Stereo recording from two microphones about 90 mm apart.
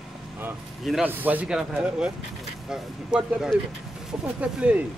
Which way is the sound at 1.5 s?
10° right (ahead or behind).